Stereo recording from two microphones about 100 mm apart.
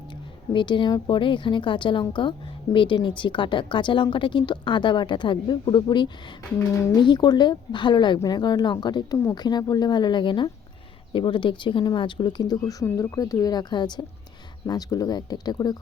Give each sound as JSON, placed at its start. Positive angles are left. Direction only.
{"t": 0.5, "sound": "a woman's voice", "side_deg": 50}
{"t": 6.6, "sound": "speech", "side_deg": 30}
{"t": 6.9, "sound": "a woman's voice", "side_deg": 45}
{"t": 12.4, "sound": "speech", "side_deg": 40}